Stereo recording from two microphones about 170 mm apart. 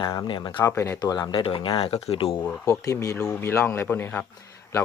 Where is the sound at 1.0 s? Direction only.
25° left (ahead or behind).